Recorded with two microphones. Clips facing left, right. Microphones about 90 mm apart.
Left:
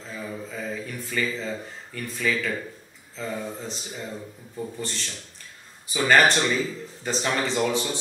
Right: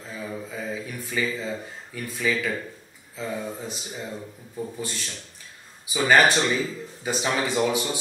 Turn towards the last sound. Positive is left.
turn(degrees=-10)  # may be behind; listen again after turning